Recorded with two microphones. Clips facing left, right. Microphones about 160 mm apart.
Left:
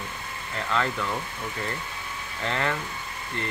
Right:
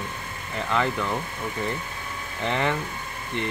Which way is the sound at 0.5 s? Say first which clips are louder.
Right 2 dB; 10° right (ahead or behind).